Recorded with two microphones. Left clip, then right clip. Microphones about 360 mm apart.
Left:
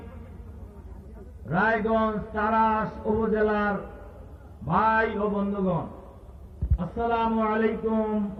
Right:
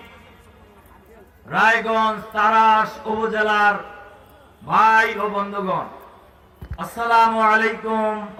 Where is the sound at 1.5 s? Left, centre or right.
Right.